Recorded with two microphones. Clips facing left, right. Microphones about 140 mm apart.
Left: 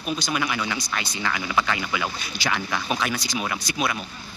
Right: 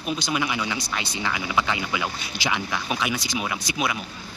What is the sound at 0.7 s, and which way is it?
Speech, 25° right (ahead or behind).